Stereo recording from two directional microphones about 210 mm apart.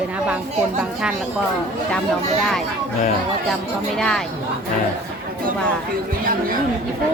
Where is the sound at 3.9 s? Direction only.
5° left (ahead or behind).